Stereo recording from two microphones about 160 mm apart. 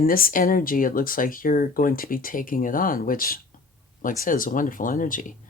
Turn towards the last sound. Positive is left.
turn(degrees=55)  # may be behind; listen again after turning